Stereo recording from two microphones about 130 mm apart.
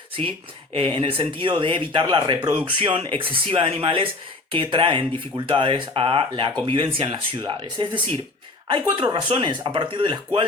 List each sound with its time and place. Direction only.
0.2 s a woman's voice: 45° right (ahead or behind)